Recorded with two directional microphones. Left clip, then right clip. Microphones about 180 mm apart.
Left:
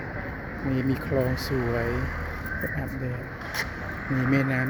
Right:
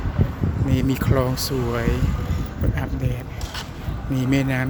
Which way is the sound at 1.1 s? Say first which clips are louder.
Right 3 dB; 45° right (ahead or behind).